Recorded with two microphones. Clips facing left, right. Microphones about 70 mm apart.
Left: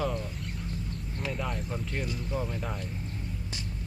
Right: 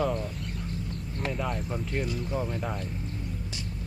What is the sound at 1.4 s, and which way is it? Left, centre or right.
Speech, centre.